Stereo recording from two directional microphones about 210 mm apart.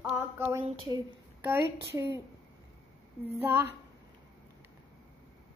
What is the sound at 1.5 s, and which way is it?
Child singing, 10° right (ahead or behind).